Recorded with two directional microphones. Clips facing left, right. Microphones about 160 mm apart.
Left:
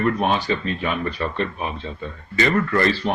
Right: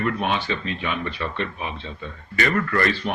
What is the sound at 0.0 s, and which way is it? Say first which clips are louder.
Speech: left 4 dB; 40° left (ahead or behind).